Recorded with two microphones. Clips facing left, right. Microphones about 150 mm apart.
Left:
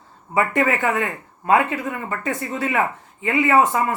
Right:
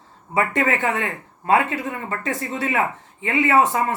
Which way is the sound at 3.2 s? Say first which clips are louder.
Left 1 dB; 30° right (ahead or behind).